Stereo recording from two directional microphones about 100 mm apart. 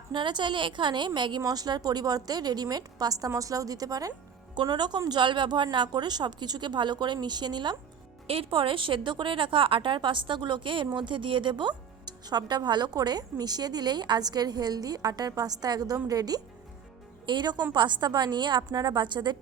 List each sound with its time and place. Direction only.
0.1 s a woman's voice: 50° right (ahead or behind)
8.3 s a woman's voice: 60° right (ahead or behind)